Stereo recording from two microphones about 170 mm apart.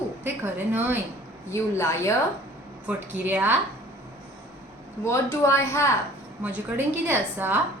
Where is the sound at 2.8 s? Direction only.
10° right (ahead or behind).